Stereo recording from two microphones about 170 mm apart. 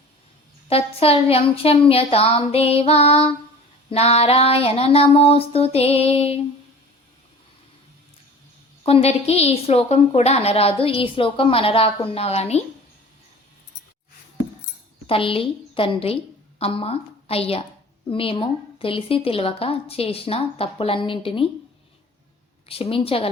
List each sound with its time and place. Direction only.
0.7 s a woman's voice: 35° left (ahead or behind)
8.8 s a woman's voice: 35° left (ahead or behind)
15.0 s a woman's voice: 30° left (ahead or behind)
22.7 s a woman's voice: 35° left (ahead or behind)